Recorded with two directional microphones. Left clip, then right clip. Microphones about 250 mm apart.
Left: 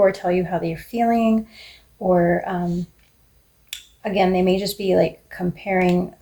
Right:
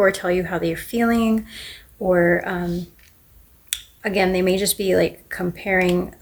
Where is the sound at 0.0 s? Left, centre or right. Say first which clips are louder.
Even; right.